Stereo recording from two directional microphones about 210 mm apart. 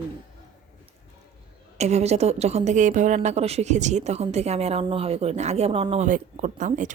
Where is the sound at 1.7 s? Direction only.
30° right (ahead or behind).